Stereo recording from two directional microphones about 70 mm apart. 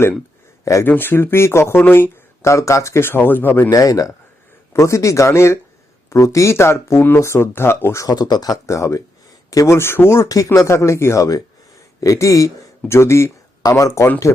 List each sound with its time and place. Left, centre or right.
0.6 s speech: left
0.9 s speech: left
3.7 s a man's voice: left
4.7 s speech: left
7.9 s speech: left
8.6 s speech: left
9.6 s speech: left
12.9 s speech: left
13.6 s speech: left